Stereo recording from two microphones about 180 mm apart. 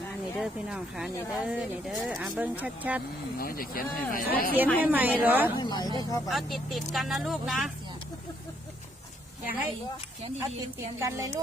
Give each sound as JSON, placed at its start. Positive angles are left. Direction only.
{"t": 0.3, "sound": "speech", "side_deg": -5}
{"t": 3.3, "sound": "speech", "side_deg": 55}
{"t": 4.8, "sound": "a woman's voice", "side_deg": -10}
{"t": 5.5, "sound": "speech", "side_deg": 20}
{"t": 6.2, "sound": "speech", "side_deg": 0}
{"t": 10.8, "sound": "a woman's voice", "side_deg": -15}